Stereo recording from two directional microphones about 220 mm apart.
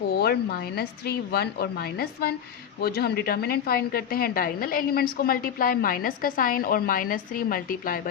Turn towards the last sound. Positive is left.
turn(degrees=40)  # may be behind; listen again after turning